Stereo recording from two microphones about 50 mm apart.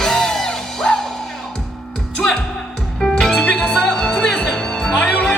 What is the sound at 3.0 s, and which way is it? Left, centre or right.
Music, centre.